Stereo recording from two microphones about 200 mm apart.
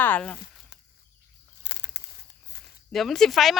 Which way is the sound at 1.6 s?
60° left (ahead or behind).